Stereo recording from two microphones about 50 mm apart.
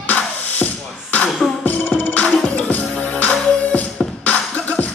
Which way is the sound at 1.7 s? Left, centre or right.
Left.